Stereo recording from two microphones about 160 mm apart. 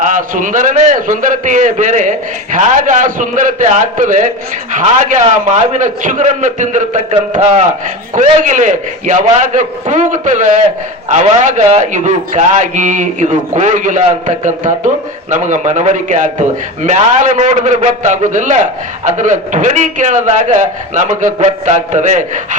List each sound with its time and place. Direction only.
0.0 s a man's voice: 55° right (ahead or behind)